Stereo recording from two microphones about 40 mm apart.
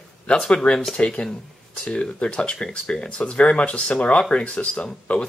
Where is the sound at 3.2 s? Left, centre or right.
Left.